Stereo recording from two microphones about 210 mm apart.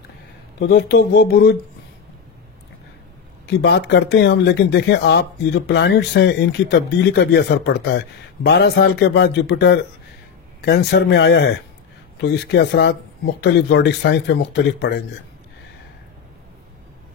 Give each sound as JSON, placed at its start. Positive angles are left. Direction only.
{"t": 0.6, "sound": "speech", "side_deg": 50}
{"t": 3.4, "sound": "speech", "side_deg": 55}